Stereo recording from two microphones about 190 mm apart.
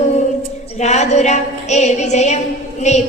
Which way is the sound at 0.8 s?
35° left (ahead or behind).